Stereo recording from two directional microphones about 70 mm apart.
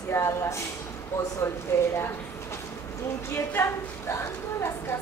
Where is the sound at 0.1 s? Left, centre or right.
Left.